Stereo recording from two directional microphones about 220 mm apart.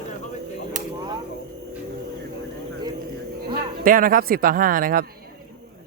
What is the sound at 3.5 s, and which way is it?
Speech, 40° right (ahead or behind).